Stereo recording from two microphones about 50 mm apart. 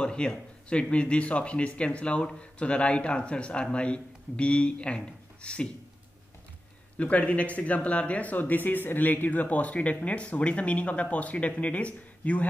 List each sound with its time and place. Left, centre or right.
0.0 s speech: centre
7.0 s speech: left